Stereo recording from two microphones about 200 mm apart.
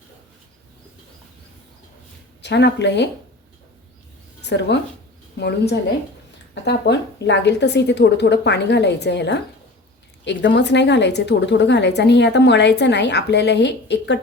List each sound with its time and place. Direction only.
2.4 s a woman's voice: 60° left (ahead or behind)
4.4 s a woman's voice: 60° left (ahead or behind)